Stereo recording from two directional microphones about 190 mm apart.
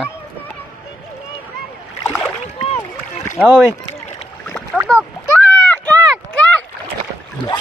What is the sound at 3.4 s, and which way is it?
Speech, 10° right (ahead or behind).